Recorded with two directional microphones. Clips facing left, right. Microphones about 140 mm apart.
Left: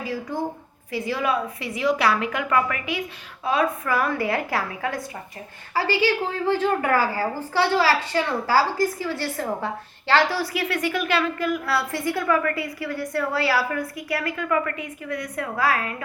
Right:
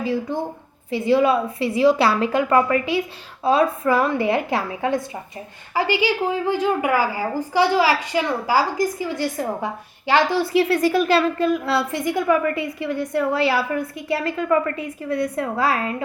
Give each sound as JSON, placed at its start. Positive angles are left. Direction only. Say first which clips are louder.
{"t": 0.0, "sound": "a woman's voice", "louder": "right 4 dB", "side_deg": -25}